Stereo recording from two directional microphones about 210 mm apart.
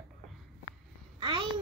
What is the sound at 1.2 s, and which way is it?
Babbling, 25° right (ahead or behind).